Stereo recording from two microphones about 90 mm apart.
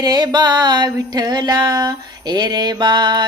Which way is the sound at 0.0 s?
50° right (ahead or behind).